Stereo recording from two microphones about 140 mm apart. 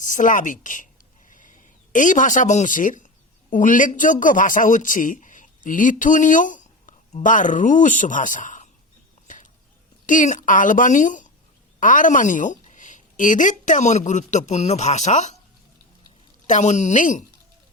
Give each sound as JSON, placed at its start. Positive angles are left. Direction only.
{"t": 0.0, "sound": "a woman's voice", "side_deg": 65}
{"t": 1.3, "sound": "a sound", "side_deg": 70}
{"t": 3.5, "sound": "a man's voice", "side_deg": 70}
{"t": 9.2, "sound": "a sound", "side_deg": 65}
{"t": 10.1, "sound": "a woman's voice", "side_deg": 65}
{"t": 16.5, "sound": "a woman's voice", "side_deg": 55}